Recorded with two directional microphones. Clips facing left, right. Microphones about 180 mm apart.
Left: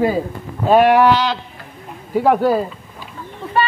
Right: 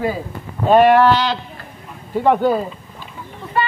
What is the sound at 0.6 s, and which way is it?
Speech, 5° left (ahead or behind).